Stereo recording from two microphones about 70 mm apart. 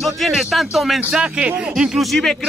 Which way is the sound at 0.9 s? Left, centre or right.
Centre.